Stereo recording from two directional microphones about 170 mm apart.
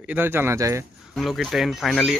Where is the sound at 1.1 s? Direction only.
Centre (ahead or behind).